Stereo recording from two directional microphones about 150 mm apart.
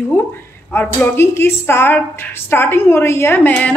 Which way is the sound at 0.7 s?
15° left (ahead or behind).